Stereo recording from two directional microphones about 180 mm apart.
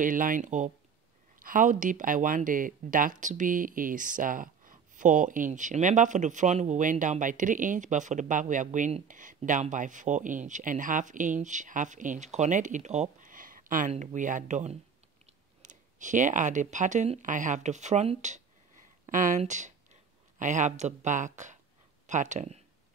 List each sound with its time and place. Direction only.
0.0 s speech: 50° right (ahead or behind)